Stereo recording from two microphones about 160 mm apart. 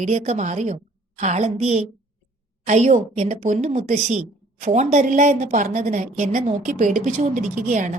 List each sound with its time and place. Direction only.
0.0 s a woman's voice: 40° right (ahead or behind)